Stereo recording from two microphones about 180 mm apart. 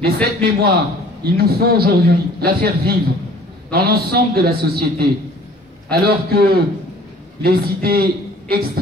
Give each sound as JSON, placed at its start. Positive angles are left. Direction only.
{"t": 0.0, "sound": "a man's voice", "side_deg": -60}